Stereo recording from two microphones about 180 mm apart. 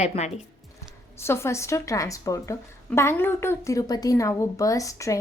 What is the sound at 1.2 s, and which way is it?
A woman's voice, 15° left (ahead or behind).